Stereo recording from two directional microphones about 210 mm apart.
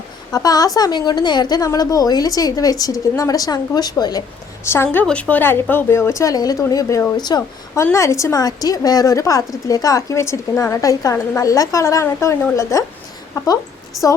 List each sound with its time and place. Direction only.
0.3 s a woman's voice: 15° left (ahead or behind)
14.0 s a woman's voice: centre (ahead or behind)